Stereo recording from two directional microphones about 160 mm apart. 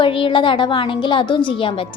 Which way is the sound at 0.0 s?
35° left (ahead or behind).